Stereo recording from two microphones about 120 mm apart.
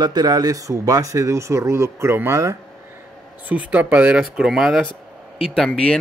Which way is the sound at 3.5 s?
10° right (ahead or behind).